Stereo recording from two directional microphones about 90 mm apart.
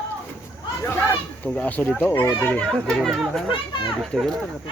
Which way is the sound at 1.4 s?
15° left (ahead or behind).